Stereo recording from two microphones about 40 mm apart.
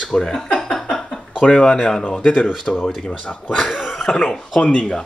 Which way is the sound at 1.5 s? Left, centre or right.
Centre.